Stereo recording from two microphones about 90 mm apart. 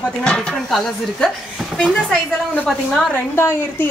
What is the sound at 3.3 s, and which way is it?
Speech, 30° left (ahead or behind).